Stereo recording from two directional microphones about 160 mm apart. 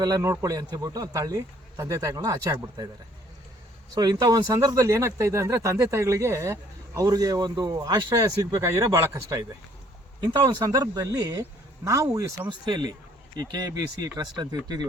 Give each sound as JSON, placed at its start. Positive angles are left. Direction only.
{"t": 0.0, "sound": "speech", "side_deg": -20}
{"t": 3.9, "sound": "speech", "side_deg": -25}